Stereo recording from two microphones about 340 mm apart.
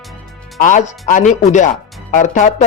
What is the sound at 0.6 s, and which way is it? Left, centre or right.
A man's voice, left.